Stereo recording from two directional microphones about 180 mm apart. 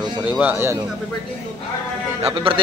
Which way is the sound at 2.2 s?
30° right (ahead or behind).